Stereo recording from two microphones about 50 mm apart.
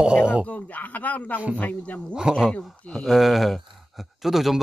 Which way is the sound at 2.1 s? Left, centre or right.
Centre.